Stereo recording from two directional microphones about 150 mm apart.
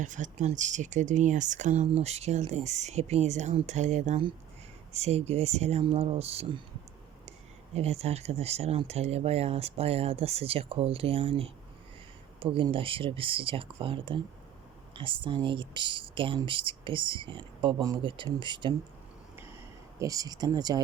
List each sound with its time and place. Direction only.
0.0 s speech: 55° right (ahead or behind)
7.7 s speech: 45° right (ahead or behind)
20.0 s speech: 25° right (ahead or behind)